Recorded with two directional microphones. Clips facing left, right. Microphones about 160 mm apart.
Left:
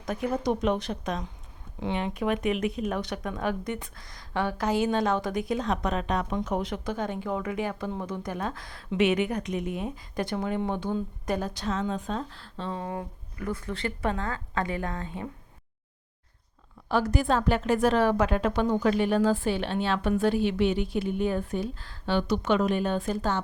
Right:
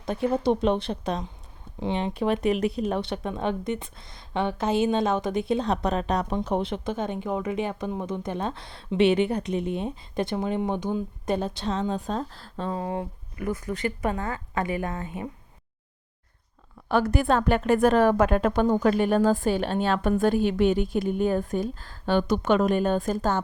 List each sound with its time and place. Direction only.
0.0 s speech: 30° right (ahead or behind)
12.8 s speech: 25° right (ahead or behind)
16.9 s a woman's voice: 60° right (ahead or behind)